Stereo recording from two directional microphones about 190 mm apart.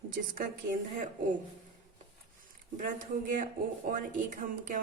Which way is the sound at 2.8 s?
45° right (ahead or behind).